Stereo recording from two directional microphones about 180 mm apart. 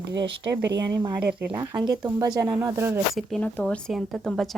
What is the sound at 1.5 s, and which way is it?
Speech, 25° right (ahead or behind).